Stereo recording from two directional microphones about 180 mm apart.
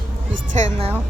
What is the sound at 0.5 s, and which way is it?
Speech, 40° right (ahead or behind).